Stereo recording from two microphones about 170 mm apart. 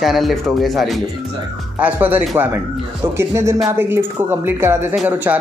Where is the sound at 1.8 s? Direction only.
10° right (ahead or behind).